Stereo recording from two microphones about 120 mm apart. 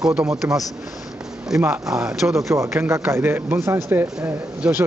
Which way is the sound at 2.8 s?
20° right (ahead or behind).